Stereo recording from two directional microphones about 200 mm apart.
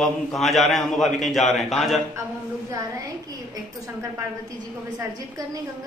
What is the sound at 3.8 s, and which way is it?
Speech, 15° right (ahead or behind).